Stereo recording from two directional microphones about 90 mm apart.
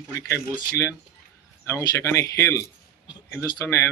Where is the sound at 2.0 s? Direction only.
35° left (ahead or behind).